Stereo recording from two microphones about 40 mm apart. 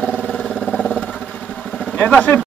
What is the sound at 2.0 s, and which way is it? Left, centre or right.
Speech, left.